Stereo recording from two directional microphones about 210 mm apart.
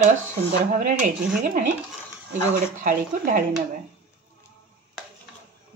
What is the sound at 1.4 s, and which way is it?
Speech, 40° right (ahead or behind).